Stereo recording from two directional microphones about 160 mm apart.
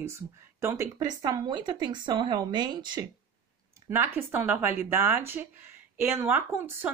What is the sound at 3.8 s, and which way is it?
Speech, 15° right (ahead or behind).